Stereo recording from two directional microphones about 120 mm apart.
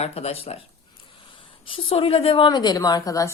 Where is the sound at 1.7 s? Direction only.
50° left (ahead or behind); by 3.3 s 30° left (ahead or behind).